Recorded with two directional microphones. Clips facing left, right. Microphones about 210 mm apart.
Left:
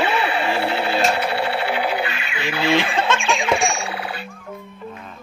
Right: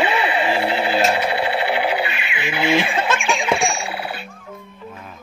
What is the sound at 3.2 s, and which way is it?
Music, centre (ahead or behind).